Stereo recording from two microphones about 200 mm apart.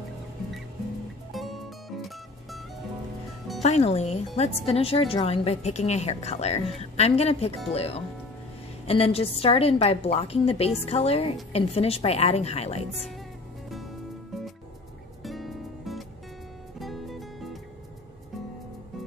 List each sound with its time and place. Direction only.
1.3 s music: centre (ahead or behind)
3.6 s a woman's voice: 35° left (ahead or behind)
15.2 s music: centre (ahead or behind)